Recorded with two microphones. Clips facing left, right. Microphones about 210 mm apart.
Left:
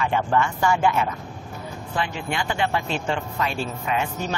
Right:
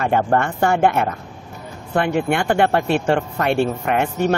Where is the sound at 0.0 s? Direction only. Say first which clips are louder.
Right 4 dB; 50° right (ahead or behind).